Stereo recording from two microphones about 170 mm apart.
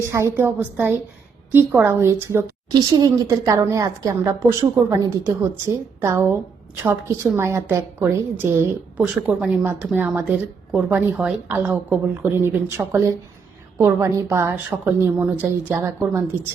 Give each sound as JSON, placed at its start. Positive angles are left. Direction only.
{"t": 0.1, "sound": "a woman's voice", "side_deg": -15}